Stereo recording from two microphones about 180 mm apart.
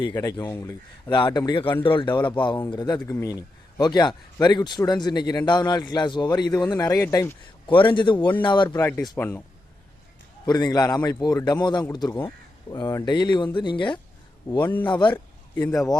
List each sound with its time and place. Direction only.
0.1 s speech: 20° left (ahead or behind)
8.7 s speech: 15° left (ahead or behind)
10.4 s speech: 20° left (ahead or behind)
14.6 s speech: 10° left (ahead or behind)
14.8 s speech: 25° left (ahead or behind)
15.1 s speech: 10° left (ahead or behind)